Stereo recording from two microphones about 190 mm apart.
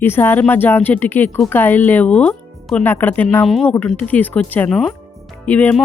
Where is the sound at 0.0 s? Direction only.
10° left (ahead or behind).